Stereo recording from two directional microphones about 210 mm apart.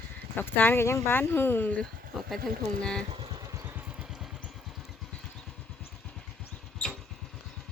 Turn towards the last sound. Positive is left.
turn(degrees=0)  # may be behind; listen again after turning